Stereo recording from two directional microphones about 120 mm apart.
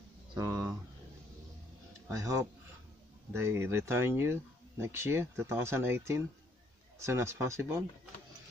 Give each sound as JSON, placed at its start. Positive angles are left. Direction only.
{"t": 0.4, "sound": "speech", "side_deg": -30}
{"t": 2.0, "sound": "speech", "side_deg": -25}